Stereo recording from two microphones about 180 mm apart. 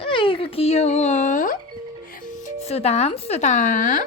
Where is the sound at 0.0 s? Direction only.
30° left (ahead or behind); by 1.5 s 45° left (ahead or behind).